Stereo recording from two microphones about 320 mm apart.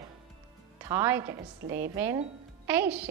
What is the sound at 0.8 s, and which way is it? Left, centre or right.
A woman's voice, centre.